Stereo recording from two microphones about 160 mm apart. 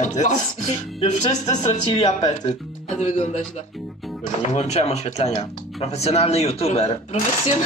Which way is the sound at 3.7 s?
Centre (ahead or behind).